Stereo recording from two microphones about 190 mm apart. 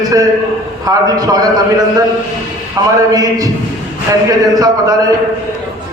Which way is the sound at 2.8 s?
20° right (ahead or behind).